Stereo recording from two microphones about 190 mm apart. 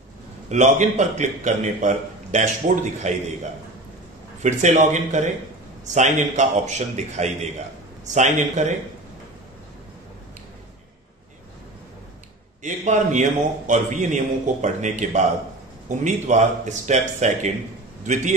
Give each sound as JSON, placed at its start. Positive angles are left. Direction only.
{"t": 0.5, "sound": "a man's voice", "side_deg": -40}
{"t": 4.4, "sound": "a man's voice", "side_deg": -40}
{"t": 12.6, "sound": "a man's voice", "side_deg": -40}